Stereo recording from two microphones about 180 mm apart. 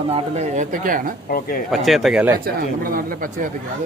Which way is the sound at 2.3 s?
55° right (ahead or behind).